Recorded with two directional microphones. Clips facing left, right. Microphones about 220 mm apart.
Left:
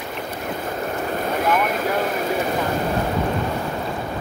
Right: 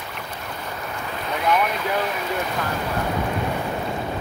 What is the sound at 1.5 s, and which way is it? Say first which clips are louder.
Boat: right 1 dB; 50° left (ahead or behind).